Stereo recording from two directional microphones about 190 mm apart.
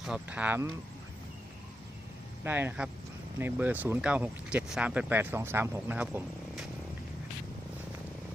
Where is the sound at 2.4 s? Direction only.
10° right (ahead or behind).